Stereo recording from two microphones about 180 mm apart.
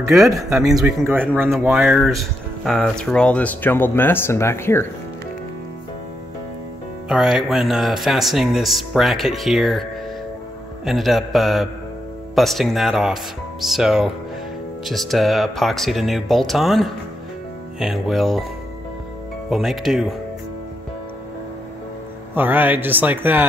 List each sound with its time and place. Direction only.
0.5 s speech: centre (ahead or behind); by 4.8 s 15° left (ahead or behind)
7.1 s speech: 5° right (ahead or behind)
10.9 s speech: centre (ahead or behind)
19.5 s speech: centre (ahead or behind)
22.3 s speech: 10° right (ahead or behind)